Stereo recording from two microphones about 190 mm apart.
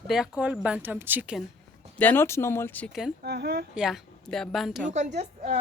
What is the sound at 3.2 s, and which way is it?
Speech, 55° right (ahead or behind).